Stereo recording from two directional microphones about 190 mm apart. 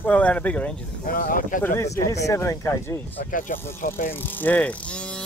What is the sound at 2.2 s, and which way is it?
Speech, 15° left (ahead or behind).